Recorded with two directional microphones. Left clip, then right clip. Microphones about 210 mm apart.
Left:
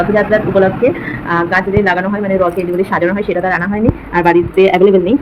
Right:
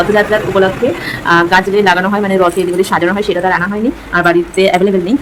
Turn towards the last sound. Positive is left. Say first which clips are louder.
# left 2 dB
turn(degrees=-20)  # may be behind; listen again after turning